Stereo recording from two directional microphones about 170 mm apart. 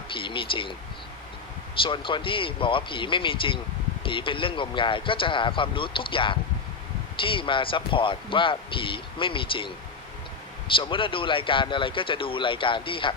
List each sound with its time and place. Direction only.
0.1 s speech: 30° left (ahead or behind)
1.8 s speech: 30° left (ahead or behind)
10.8 s speech: 30° left (ahead or behind)